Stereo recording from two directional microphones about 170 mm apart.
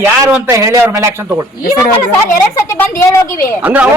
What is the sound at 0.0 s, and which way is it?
A man's voice, 10° right (ahead or behind).